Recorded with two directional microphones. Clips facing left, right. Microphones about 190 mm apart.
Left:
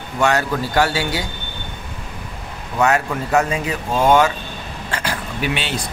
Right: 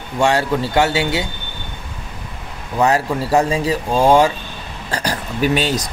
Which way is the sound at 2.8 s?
30° right (ahead or behind).